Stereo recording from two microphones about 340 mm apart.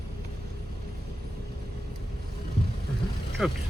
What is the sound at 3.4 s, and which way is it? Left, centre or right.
Speech, centre.